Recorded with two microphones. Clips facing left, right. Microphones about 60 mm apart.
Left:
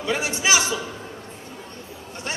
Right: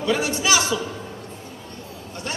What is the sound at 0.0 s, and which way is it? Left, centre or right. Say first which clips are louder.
Speech: right 2 dB; left.